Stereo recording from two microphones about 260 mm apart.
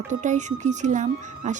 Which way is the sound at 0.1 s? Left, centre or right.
Right.